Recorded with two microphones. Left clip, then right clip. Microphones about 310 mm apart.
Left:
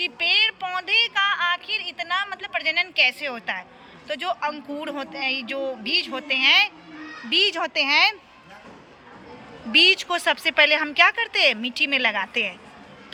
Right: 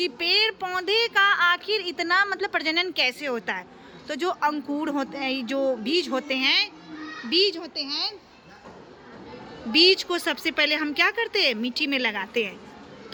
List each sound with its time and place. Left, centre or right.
0.0 s female singing: centre
7.3 s speech: centre
7.9 s speech: left
9.7 s female singing: centre